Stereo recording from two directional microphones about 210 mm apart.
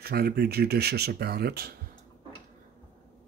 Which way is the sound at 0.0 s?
50° right (ahead or behind).